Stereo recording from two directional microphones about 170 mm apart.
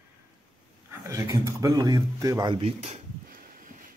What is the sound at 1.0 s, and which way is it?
Speech, 20° right (ahead or behind).